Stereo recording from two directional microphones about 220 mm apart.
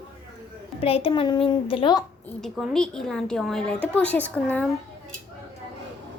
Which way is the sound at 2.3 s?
Centre (ahead or behind).